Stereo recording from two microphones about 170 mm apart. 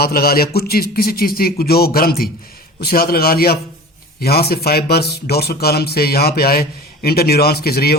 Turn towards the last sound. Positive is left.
turn(degrees=65)  # may be behind; listen again after turning